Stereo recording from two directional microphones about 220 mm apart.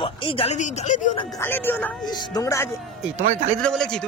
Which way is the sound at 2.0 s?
20° left (ahead or behind).